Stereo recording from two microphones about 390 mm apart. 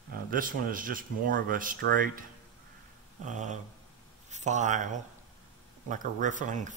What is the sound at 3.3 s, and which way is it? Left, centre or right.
Speech, centre.